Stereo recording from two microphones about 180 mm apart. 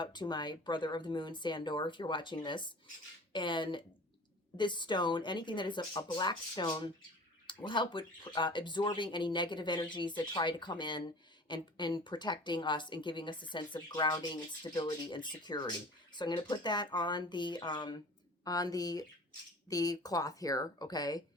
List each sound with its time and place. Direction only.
0.0 s speech: 25° left (ahead or behind)